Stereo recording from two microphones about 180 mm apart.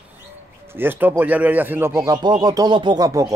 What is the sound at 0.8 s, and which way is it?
A man's voice, 10° right (ahead or behind).